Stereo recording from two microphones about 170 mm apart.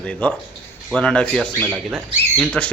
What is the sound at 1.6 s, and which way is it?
Speech, 10° right (ahead or behind).